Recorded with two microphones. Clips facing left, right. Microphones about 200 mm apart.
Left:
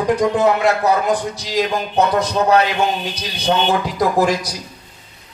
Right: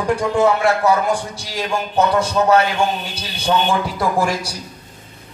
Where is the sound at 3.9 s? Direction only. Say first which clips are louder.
Left 3 dB; 20° left (ahead or behind).